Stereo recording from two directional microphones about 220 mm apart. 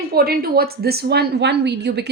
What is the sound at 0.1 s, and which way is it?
A woman's voice, 45° right (ahead or behind).